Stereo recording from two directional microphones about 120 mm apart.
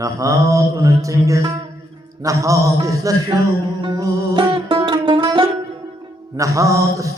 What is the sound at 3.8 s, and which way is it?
Music, 35° right (ahead or behind).